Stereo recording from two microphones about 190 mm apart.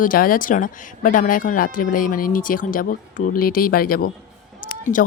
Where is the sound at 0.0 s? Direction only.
50° left (ahead or behind).